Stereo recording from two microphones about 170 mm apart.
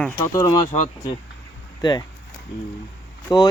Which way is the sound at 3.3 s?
25° left (ahead or behind).